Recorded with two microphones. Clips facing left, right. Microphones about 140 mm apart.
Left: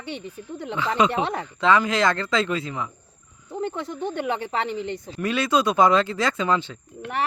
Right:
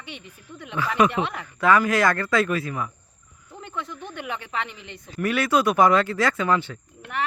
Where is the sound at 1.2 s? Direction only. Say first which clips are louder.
Left 2 dB; 35° left (ahead or behind).